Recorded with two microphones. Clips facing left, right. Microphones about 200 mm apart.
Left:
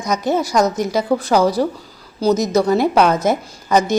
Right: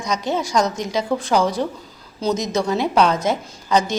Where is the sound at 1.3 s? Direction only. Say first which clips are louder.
Left 3 dB; 35° left (ahead or behind).